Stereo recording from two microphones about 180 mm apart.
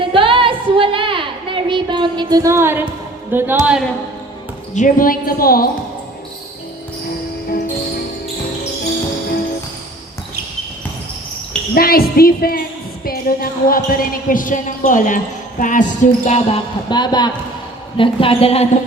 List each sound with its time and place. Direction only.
0.0 s a sound: 30° right (ahead or behind); by 2.8 s 15° right (ahead or behind)
3.3 s speech: 10° right (ahead or behind)
4.7 s speech: 45° left (ahead or behind)
11.7 s speech: 55° left (ahead or behind); by 16.6 s 40° left (ahead or behind)
16.9 s a man's voice: 25° left (ahead or behind)